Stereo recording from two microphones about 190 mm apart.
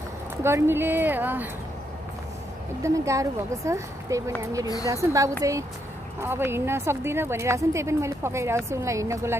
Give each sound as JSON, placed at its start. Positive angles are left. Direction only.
{"t": 0.4, "sound": "a woman's voice", "side_deg": -10}
{"t": 2.8, "sound": "a woman's voice", "side_deg": -15}